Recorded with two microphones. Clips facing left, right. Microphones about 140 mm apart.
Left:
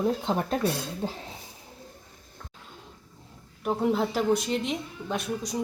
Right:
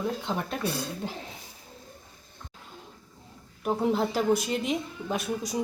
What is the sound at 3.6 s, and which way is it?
A woman's voice, centre (ahead or behind).